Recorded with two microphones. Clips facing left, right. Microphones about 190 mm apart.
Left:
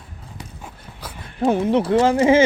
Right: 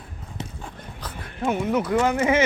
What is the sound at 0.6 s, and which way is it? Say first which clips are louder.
Dog: right 1 dB; 10° left (ahead or behind).